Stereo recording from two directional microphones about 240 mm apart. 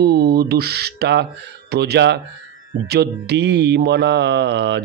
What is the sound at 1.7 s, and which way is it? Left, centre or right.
Music, right.